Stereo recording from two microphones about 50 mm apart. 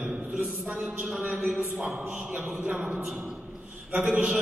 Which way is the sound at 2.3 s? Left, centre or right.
Right.